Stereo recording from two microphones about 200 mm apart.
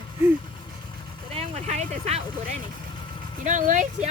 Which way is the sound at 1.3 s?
35° right (ahead or behind).